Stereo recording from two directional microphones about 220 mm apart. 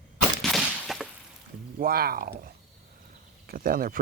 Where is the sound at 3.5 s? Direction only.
40° right (ahead or behind).